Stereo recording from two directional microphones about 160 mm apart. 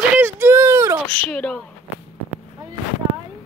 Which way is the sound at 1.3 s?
5° left (ahead or behind).